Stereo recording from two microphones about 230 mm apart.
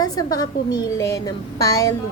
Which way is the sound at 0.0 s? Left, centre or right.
Centre.